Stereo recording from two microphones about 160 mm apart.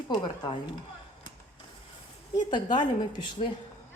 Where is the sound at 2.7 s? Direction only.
30° left (ahead or behind).